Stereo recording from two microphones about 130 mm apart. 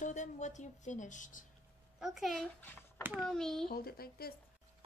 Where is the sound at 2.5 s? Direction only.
15° left (ahead or behind).